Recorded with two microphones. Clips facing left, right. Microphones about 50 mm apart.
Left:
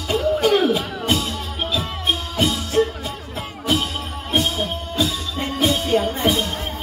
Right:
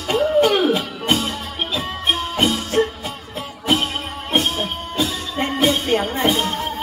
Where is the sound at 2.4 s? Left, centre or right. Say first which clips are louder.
Even; right.